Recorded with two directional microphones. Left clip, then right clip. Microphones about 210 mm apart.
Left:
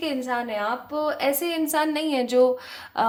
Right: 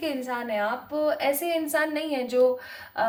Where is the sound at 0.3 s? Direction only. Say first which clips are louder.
Left 1 dB; 40° left (ahead or behind).